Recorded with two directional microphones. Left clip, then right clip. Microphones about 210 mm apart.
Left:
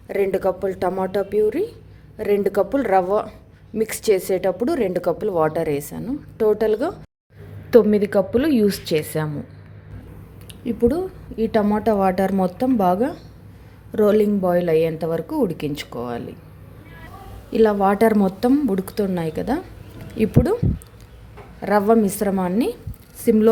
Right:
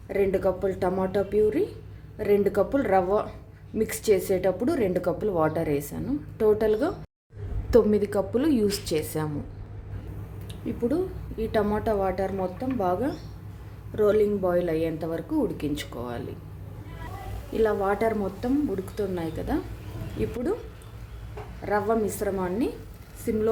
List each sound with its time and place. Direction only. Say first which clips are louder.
0.1 s a woman's voice: left 4 dB; 45° left (ahead or behind)
7.7 s a woman's voice: left 6 dB; 15° left (ahead or behind)
10.5 s a woman's voice: left 8 dB; 35° left (ahead or behind)
17.5 s a woman's voice: left 7 dB; 40° left (ahead or behind)
21.6 s a woman's voice: left 8 dB; 45° left (ahead or behind)